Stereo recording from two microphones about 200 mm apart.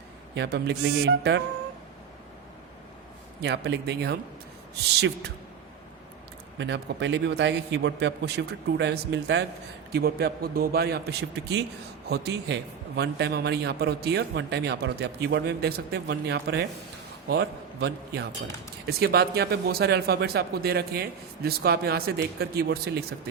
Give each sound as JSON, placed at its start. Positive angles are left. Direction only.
{"t": 0.3, "sound": "speech", "side_deg": -55}
{"t": 3.4, "sound": "speech", "side_deg": -60}
{"t": 6.6, "sound": "a man's voice", "side_deg": -60}